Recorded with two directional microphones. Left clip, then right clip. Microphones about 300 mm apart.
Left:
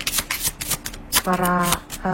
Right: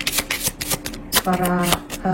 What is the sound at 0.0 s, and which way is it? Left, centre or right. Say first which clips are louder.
Shuffling cards: right 2 dB; centre.